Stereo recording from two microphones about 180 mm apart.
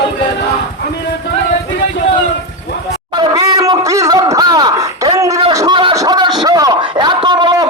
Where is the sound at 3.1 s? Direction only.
20° right (ahead or behind).